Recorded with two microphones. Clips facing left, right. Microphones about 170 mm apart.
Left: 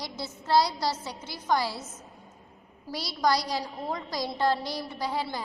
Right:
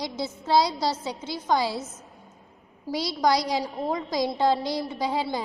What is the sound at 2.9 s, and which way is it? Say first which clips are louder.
A woman's voice: right 3 dB; 20° right (ahead or behind).